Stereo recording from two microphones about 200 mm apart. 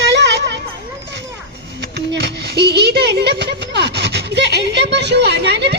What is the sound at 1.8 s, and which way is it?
Speech, 55° right (ahead or behind).